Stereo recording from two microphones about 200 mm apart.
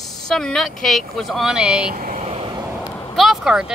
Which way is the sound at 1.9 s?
40° right (ahead or behind).